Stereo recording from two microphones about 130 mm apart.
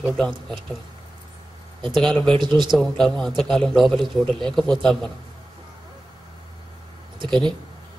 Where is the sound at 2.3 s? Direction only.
35° right (ahead or behind).